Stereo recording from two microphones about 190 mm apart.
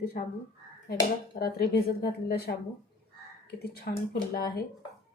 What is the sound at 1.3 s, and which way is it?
Speech, 50° left (ahead or behind).